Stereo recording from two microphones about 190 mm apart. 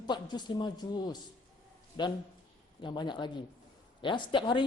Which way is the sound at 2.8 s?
25° left (ahead or behind).